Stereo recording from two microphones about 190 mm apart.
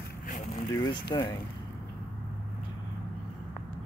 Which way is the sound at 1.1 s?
25° left (ahead or behind).